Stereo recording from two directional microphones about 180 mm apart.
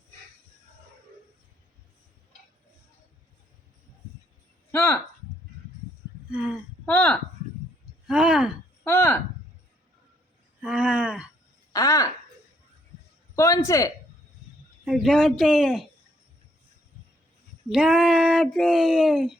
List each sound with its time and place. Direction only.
4.7 s speech: 5° left (ahead or behind)
6.3 s speech: 5° right (ahead or behind)
6.8 s speech: 5° left (ahead or behind)
8.0 s speech: 5° right (ahead or behind)
8.8 s speech: 10° left (ahead or behind)
10.6 s a sound: 5° right (ahead or behind)
11.7 s a sound: 20° left (ahead or behind)
13.3 s speech: 15° left (ahead or behind)
14.8 s speech: 5° right (ahead or behind)
17.7 s speech: 5° right (ahead or behind)